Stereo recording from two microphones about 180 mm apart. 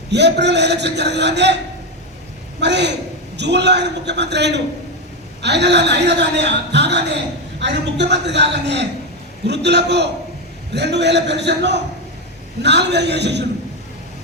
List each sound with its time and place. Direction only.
0.1 s a man's voice: 70° right (ahead or behind)
2.6 s a man's voice: 70° right (ahead or behind)